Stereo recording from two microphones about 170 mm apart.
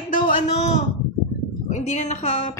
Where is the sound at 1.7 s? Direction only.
45° left (ahead or behind).